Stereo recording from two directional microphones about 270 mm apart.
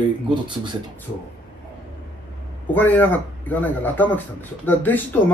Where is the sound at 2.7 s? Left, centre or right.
Centre.